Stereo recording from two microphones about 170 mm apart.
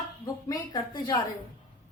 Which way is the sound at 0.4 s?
20° left (ahead or behind).